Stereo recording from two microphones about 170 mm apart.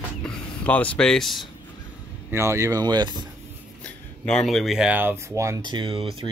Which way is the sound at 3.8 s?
5° left (ahead or behind).